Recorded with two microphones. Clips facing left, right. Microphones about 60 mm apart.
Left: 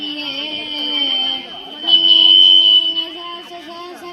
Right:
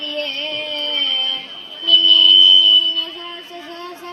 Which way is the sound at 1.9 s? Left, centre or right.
Centre.